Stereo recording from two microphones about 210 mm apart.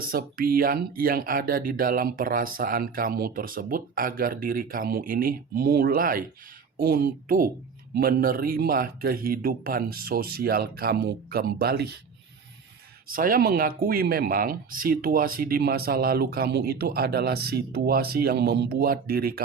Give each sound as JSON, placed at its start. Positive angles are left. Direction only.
{"t": 0.0, "sound": "speech", "side_deg": -45}
{"t": 13.1, "sound": "speech", "side_deg": -40}